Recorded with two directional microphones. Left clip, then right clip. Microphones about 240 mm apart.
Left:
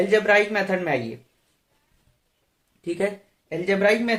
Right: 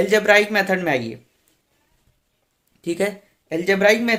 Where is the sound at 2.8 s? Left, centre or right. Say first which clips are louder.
Right 3 dB; right.